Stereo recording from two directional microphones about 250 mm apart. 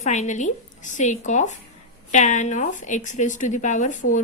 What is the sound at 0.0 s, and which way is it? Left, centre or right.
A woman's voice, left.